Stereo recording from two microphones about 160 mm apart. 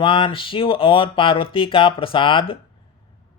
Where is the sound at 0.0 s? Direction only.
35° left (ahead or behind).